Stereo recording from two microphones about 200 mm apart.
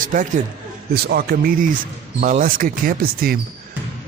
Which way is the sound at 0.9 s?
50° right (ahead or behind).